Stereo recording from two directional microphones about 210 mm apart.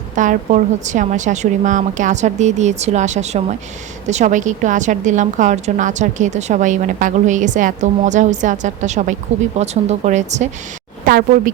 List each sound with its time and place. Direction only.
0.2 s a woman's voice: 35° right (ahead or behind)